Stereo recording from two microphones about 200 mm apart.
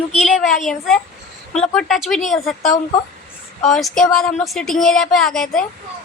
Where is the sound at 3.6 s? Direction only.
Centre (ahead or behind).